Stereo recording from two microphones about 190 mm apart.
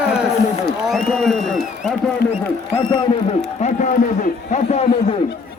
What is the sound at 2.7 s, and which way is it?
Speech, 20° left (ahead or behind).